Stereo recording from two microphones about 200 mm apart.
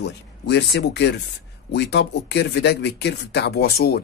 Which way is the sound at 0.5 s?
60° left (ahead or behind).